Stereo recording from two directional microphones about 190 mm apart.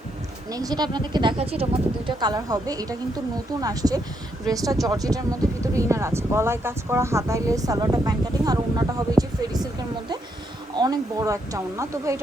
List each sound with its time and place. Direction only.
0.5 s speech: 20° right (ahead or behind)